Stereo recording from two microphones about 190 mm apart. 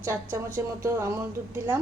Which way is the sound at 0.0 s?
15° right (ahead or behind).